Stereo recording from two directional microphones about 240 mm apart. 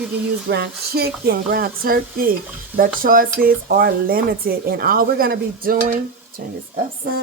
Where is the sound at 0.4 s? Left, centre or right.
Right.